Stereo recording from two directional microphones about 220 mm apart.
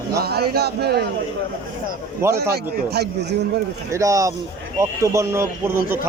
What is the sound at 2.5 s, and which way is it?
Speech, 45° right (ahead or behind).